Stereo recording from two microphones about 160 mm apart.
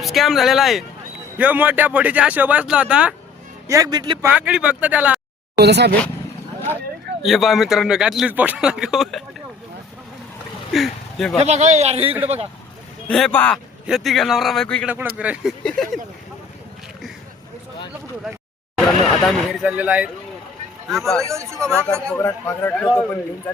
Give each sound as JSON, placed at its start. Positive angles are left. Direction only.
{"t": 0.0, "sound": "a man's voice", "side_deg": 0}
{"t": 3.7, "sound": "a man's voice", "side_deg": -20}
{"t": 4.2, "sound": "speech", "side_deg": -10}
{"t": 5.5, "sound": "speech", "side_deg": -90}
{"t": 7.2, "sound": "a man's voice", "side_deg": 0}
{"t": 10.7, "sound": "speech", "side_deg": 0}
{"t": 11.4, "sound": "a man's voice", "side_deg": -45}
{"t": 13.1, "sound": "a man's voice", "side_deg": 5}
{"t": 14.8, "sound": "speech", "side_deg": -10}
{"t": 15.6, "sound": "a man's voice", "side_deg": 5}
{"t": 19.2, "sound": "a man's voice", "side_deg": 0}
{"t": 21.2, "sound": "speech", "side_deg": -20}
{"t": 21.6, "sound": "a man's voice", "side_deg": 5}
{"t": 22.2, "sound": "speech", "side_deg": 15}